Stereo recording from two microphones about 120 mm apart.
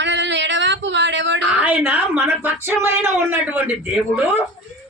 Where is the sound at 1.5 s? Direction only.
10° right (ahead or behind).